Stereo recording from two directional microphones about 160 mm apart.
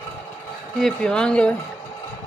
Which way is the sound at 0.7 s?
5° left (ahead or behind).